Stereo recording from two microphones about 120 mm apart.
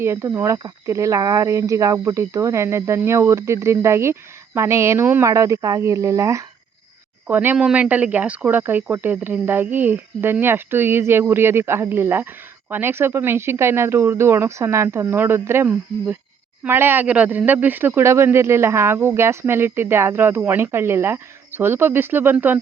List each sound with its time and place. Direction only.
0.0 s speech: 20° right (ahead or behind)